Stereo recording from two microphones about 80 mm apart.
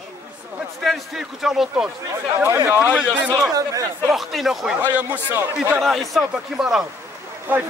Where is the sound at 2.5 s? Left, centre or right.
Right.